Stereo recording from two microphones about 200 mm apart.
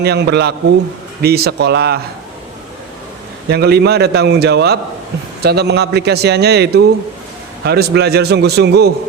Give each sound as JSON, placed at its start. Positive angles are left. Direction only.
{"t": 0.0, "sound": "a man's voice", "side_deg": -55}
{"t": 3.5, "sound": "a man's voice", "side_deg": -55}